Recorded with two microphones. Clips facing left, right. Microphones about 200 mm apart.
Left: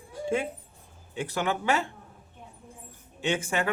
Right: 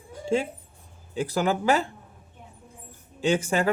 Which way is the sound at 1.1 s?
35° right (ahead or behind).